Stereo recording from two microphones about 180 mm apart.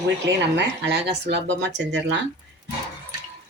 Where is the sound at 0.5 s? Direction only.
70° right (ahead or behind).